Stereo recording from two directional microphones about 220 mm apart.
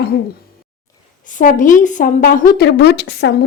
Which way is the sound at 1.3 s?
35° left (ahead or behind).